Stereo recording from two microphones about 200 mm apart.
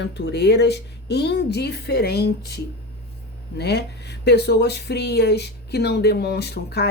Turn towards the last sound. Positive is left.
turn(degrees=55)  # may be behind; listen again after turning